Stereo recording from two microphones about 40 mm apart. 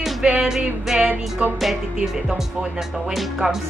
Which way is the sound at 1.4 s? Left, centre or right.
Right.